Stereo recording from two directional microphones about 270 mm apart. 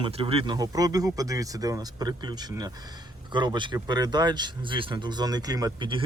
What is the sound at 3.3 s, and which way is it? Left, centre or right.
Speech, centre.